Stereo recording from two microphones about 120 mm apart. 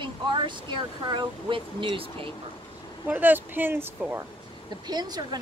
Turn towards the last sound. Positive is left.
turn(degrees=-35)  # may be behind; listen again after turning